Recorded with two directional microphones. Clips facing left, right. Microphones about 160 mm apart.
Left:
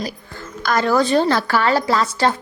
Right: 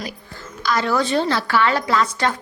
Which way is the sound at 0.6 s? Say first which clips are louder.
Left 3 dB; 50° left (ahead or behind).